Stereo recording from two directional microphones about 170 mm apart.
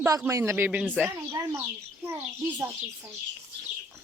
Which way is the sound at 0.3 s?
15° right (ahead or behind).